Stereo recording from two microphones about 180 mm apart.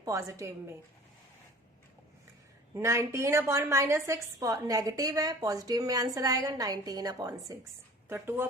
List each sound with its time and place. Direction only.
0.0 s a woman's voice: 15° right (ahead or behind)
2.7 s a woman's voice: 15° right (ahead or behind)